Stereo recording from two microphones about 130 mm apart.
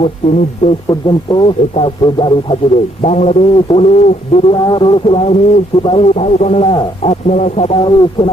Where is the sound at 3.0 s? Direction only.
55° left (ahead or behind).